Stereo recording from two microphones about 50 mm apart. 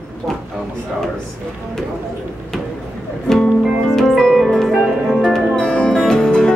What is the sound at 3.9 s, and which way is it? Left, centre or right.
Music, centre.